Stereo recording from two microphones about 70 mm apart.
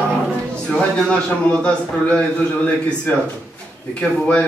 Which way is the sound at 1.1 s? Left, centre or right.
Centre.